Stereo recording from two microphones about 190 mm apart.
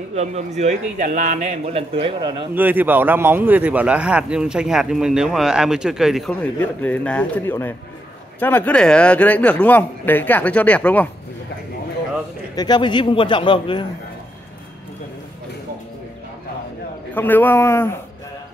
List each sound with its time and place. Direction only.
0.1 s a man's voice: 35° right (ahead or behind)
2.5 s a man's voice: 10° right (ahead or behind); by 11.1 s 5° left (ahead or behind)
12.5 s a man's voice: 20° left (ahead or behind)
17.1 s a man's voice: 10° left (ahead or behind)